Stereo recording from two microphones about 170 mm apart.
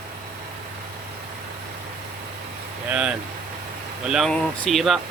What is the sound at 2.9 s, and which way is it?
Speech, 5° right (ahead or behind).